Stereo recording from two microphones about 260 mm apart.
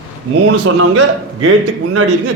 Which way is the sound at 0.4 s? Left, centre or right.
Right.